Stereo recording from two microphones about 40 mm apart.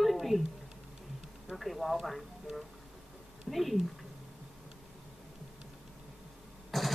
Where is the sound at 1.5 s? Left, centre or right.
Centre.